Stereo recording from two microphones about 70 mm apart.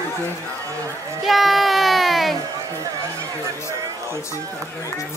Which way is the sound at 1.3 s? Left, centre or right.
Centre.